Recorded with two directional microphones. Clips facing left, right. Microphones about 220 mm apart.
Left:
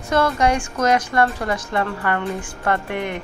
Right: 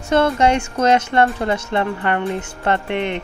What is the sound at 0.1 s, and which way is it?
Speech, 25° right (ahead or behind).